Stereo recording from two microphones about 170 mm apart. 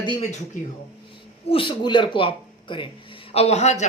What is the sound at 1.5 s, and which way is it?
A man's voice, 30° left (ahead or behind).